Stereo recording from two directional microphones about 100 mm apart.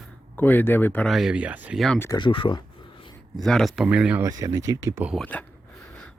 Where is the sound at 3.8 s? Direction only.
10° right (ahead or behind).